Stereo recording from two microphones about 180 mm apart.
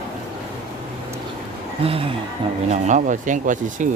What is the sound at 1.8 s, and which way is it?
Speech, 30° right (ahead or behind).